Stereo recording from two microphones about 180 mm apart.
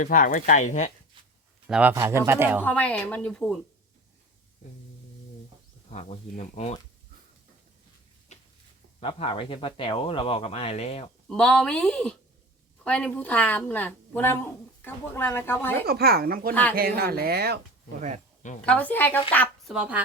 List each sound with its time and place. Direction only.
0.0 s speech: 50° left (ahead or behind)
1.6 s speech: 5° right (ahead or behind)
1.9 s speech: 15° right (ahead or behind)
2.6 s a woman's voice: 10° left (ahead or behind)
5.9 s speech: 40° left (ahead or behind)
8.3 s a sound: 40° left (ahead or behind)
9.0 s speech: 30° left (ahead or behind)
11.3 s a woman's voice: 5° left (ahead or behind)
15.9 s speech: 60° right (ahead or behind)
18.6 s a woman's voice: 5° left (ahead or behind)
19.7 s speech: 5° right (ahead or behind)